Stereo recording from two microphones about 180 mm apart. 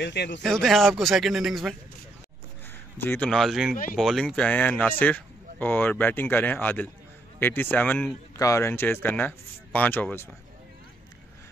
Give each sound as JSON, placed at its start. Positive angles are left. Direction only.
{"t": 0.0, "sound": "speech", "side_deg": 70}
{"t": 0.4, "sound": "speech", "side_deg": 0}
{"t": 3.0, "sound": "speech", "side_deg": 10}